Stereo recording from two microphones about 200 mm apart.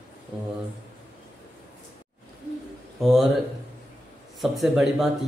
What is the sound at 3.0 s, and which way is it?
Speech, centre (ahead or behind).